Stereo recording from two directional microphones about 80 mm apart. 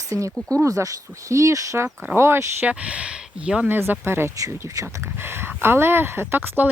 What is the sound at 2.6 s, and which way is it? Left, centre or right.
Speech, centre.